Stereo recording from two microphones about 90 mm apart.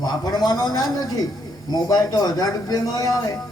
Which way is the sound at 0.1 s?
50° left (ahead or behind).